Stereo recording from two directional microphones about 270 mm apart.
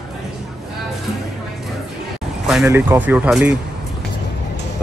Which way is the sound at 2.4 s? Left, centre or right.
Centre.